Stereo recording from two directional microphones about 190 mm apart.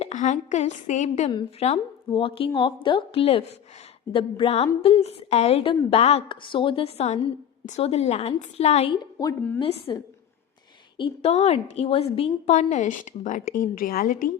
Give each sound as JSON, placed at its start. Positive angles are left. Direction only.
{"t": 0.0, "sound": "a woman's voice", "side_deg": 40}
{"t": 9.1, "sound": "a woman's voice", "side_deg": 15}
{"t": 9.6, "sound": "a woman's voice", "side_deg": 30}